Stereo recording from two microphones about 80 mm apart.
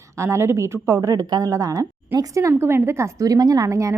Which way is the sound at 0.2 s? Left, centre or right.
Right.